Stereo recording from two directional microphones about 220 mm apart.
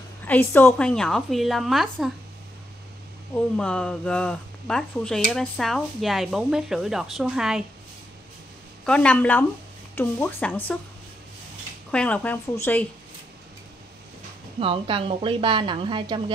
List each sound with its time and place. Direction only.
0.2 s speech: 10° left (ahead or behind)
3.5 s speech: 5° left (ahead or behind)
8.8 s a woman's voice: 5° left (ahead or behind)
11.9 s a woman's voice: 5° left (ahead or behind)
14.6 s a woman's voice: 25° right (ahead or behind)